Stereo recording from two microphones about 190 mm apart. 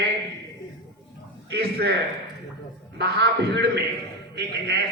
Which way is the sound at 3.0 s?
60° right (ahead or behind).